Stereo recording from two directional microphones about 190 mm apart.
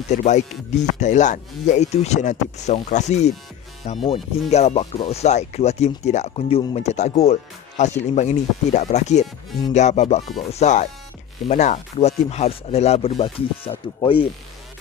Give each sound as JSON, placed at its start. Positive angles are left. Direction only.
{"t": 0.1, "sound": "speech", "side_deg": 40}